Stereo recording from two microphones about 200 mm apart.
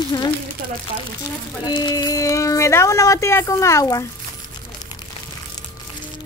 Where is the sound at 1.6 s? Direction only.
20° left (ahead or behind).